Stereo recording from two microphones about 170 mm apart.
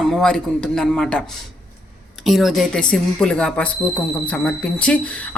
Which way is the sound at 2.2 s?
Centre (ahead or behind).